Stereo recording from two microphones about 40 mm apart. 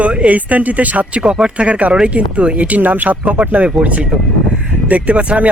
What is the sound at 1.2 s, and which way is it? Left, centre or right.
Speech, right.